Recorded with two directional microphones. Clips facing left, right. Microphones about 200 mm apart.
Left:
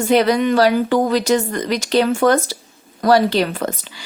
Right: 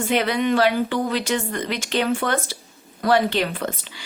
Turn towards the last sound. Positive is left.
turn(degrees=40)  # may be behind; listen again after turning